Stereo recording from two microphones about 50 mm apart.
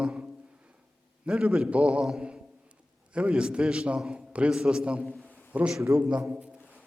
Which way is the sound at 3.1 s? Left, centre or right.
Right.